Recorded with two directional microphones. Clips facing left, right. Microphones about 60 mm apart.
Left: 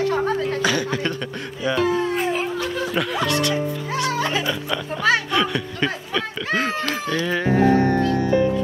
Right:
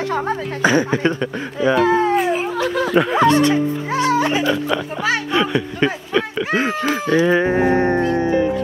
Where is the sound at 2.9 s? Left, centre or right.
Right.